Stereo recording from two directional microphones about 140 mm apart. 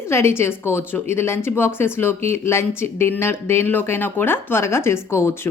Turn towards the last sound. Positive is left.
turn(degrees=20)  # may be behind; listen again after turning